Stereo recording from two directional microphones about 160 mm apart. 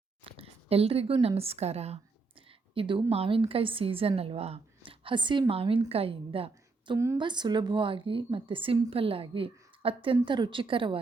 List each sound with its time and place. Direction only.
0.3 s a woman's voice: 35° right (ahead or behind)